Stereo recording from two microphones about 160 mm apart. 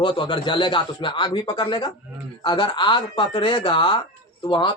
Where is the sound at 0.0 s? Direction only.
30° left (ahead or behind).